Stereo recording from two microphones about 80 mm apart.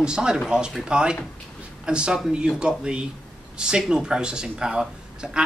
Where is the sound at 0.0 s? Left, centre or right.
Centre.